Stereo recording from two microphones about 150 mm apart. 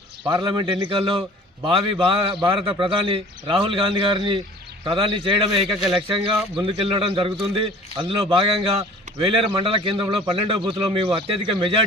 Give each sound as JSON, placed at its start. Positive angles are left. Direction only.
{"t": 0.3, "sound": "a man's voice", "side_deg": -30}